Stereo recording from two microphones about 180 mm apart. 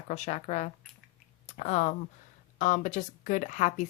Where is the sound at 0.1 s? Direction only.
40° left (ahead or behind).